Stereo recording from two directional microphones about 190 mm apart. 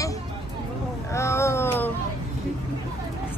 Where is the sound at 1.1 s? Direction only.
15° left (ahead or behind).